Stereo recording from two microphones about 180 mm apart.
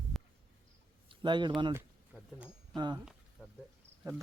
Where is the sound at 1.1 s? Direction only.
25° right (ahead or behind).